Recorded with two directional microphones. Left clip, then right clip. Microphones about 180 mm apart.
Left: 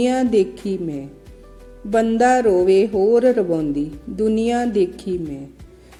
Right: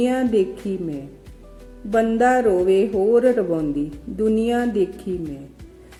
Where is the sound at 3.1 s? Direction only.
35° left (ahead or behind).